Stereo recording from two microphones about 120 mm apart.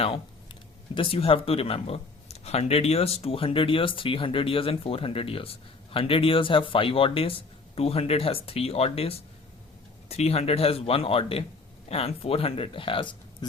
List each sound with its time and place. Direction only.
0.9 s speech: 50° left (ahead or behind)